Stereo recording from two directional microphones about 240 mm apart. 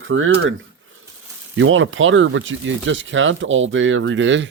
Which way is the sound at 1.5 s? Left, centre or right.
Right.